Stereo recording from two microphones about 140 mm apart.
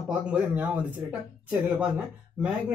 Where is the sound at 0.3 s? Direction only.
10° right (ahead or behind).